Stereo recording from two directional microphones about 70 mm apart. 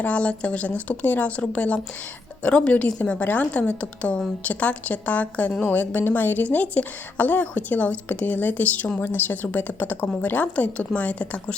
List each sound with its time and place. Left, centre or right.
0.0 s a woman's voice: centre